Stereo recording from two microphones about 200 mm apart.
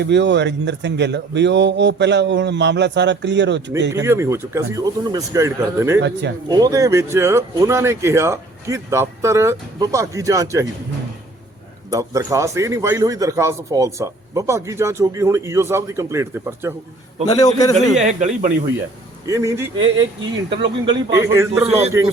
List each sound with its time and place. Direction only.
0.0 s speech: 60° right (ahead or behind)
4.0 s a man's voice: 15° right (ahead or behind)
6.0 s speech: 60° right (ahead or behind)
6.5 s a man's voice: 15° right (ahead or behind)
11.9 s a man's voice: 15° right (ahead or behind)
17.3 s a man's voice: 20° left (ahead or behind)
18.0 s a man's voice: 35° right (ahead or behind)
19.2 s a man's voice: 15° right (ahead or behind)
20.6 s speech: 25° right (ahead or behind)
21.2 s a man's voice: 15° right (ahead or behind)